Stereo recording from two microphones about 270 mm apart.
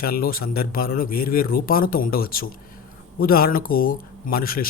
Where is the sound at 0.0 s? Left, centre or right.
Left.